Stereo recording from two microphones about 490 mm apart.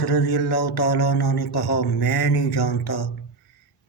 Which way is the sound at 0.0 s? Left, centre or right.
Left.